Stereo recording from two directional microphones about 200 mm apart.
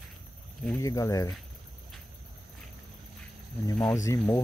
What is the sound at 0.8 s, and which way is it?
Speech, 15° left (ahead or behind).